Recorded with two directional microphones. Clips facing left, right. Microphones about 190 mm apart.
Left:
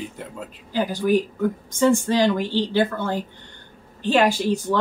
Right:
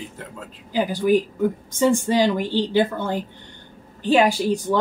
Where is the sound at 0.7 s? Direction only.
10° right (ahead or behind).